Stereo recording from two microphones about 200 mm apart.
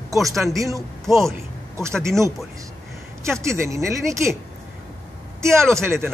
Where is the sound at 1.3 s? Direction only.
15° right (ahead or behind).